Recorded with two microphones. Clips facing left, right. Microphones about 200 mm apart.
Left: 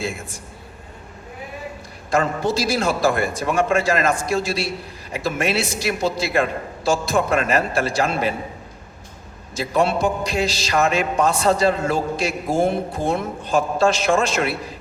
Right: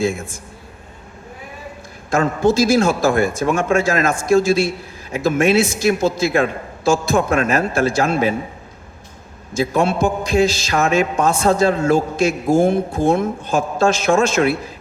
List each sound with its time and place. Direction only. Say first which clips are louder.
2.0 s a man's voice: right 4 dB; 45° right (ahead or behind)
9.6 s a man's voice: right 3 dB; 45° right (ahead or behind)